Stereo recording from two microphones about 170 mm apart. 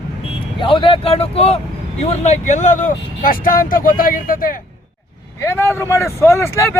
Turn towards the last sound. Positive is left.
turn(degrees=15)  # may be behind; listen again after turning